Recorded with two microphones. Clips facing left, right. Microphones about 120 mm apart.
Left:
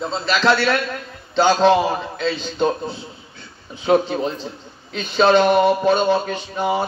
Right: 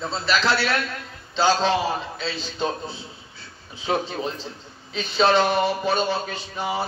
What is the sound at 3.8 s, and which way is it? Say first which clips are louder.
A man's voice: left 8 dB; 60° left (ahead or behind).